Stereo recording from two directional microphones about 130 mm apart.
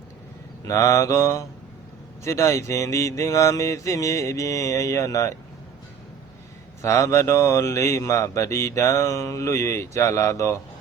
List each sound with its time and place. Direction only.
0.7 s mantra: 25° left (ahead or behind)
6.8 s mantra: 20° left (ahead or behind)